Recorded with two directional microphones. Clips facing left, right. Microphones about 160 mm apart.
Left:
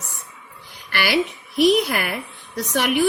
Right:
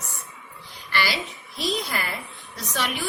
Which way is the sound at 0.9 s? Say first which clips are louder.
Left 6 dB; 65° left (ahead or behind).